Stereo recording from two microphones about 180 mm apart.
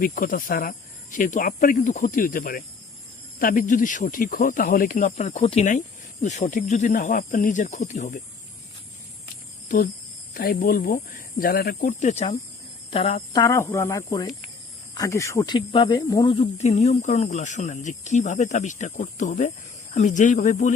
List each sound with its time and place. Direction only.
0.0 s speech: 50° left (ahead or behind)
9.6 s speech: 50° left (ahead or behind)
13.3 s speech: 20° left (ahead or behind)
15.5 s speech: 25° left (ahead or behind)
16.3 s speech: 35° left (ahead or behind)